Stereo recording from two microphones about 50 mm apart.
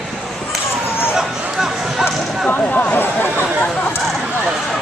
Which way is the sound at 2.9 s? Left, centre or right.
Left.